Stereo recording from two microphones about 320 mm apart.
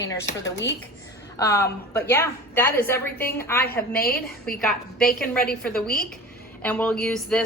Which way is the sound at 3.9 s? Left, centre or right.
Left.